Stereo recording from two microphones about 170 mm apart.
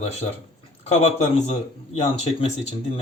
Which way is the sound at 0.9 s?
40° left (ahead or behind).